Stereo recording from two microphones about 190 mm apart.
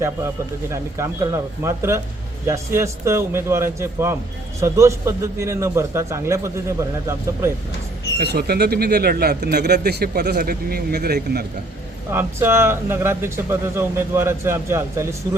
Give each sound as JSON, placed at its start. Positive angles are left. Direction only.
{"t": 0.7, "sound": "speech", "side_deg": -15}
{"t": 8.2, "sound": "speech", "side_deg": -55}
{"t": 12.1, "sound": "speech", "side_deg": -10}